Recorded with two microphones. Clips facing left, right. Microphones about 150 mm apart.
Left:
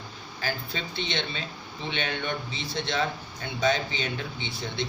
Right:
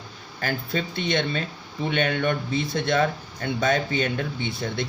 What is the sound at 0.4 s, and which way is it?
Speech, 50° right (ahead or behind).